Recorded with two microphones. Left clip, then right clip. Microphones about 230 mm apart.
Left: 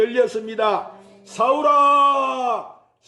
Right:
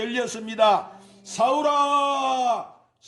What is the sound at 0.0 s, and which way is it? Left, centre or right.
Speech, right.